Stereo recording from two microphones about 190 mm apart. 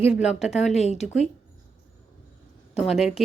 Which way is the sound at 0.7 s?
35° left (ahead or behind).